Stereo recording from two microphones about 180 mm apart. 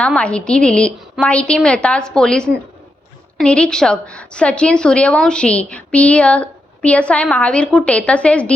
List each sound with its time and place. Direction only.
0.0 s a woman's voice: 5° left (ahead or behind)